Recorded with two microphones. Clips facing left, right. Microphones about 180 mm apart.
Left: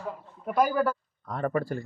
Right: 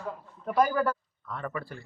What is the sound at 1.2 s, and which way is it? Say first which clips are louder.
Speech: left 8 dB; 40° left (ahead or behind).